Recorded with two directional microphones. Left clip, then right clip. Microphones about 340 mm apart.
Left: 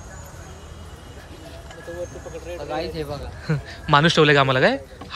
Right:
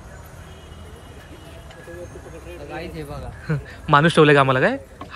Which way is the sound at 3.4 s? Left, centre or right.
Centre.